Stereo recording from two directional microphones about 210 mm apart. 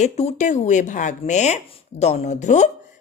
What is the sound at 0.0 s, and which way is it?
Speech, 35° left (ahead or behind).